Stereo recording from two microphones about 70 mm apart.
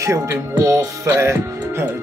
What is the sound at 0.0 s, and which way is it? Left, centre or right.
Speech, right.